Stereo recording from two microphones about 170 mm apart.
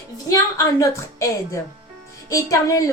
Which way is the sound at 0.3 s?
20° left (ahead or behind).